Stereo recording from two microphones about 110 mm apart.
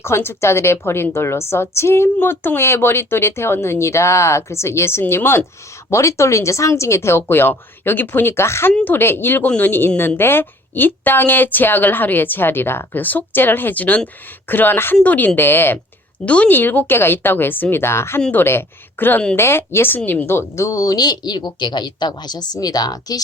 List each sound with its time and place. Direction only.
0.0 s a woman's voice: 20° left (ahead or behind)